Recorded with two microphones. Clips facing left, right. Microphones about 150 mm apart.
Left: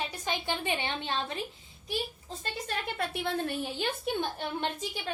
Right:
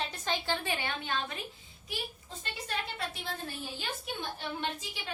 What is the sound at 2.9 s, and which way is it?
Speech, 55° left (ahead or behind).